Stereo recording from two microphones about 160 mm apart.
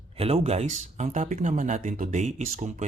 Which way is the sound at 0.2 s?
40° right (ahead or behind).